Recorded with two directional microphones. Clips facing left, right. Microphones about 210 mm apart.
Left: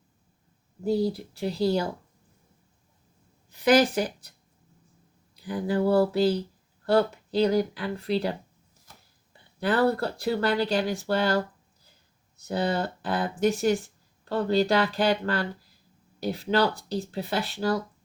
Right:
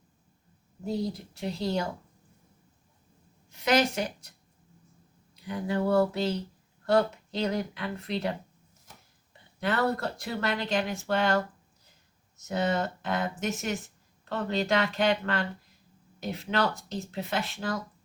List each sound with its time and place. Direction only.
0.9 s speech: 30° left (ahead or behind)
3.5 s speech: 35° left (ahead or behind)
5.4 s speech: 35° left (ahead or behind)
9.6 s speech: 35° left (ahead or behind)